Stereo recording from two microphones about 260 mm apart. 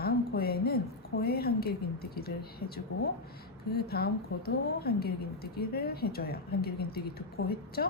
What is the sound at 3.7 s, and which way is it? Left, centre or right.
Speech, left.